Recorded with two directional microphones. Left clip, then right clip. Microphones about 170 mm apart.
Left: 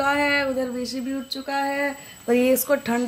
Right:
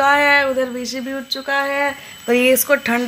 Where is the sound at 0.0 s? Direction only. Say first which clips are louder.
Right 8 dB; centre (ahead or behind).